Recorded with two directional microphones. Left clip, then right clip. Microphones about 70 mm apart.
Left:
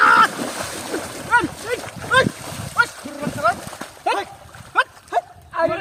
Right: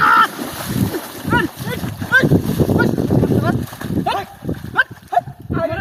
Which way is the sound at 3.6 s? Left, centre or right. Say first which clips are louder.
Right 4 dB; right.